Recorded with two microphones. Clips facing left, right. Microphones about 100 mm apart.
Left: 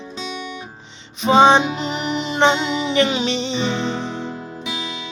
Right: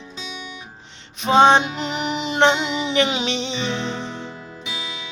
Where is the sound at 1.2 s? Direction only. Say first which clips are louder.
Left 1 dB; centre (ahead or behind).